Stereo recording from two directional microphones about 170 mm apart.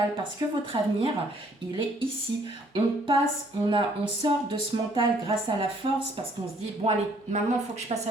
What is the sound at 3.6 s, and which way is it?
Speech, 30° right (ahead or behind).